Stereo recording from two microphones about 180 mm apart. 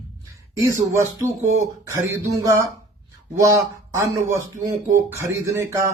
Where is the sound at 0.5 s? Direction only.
15° right (ahead or behind).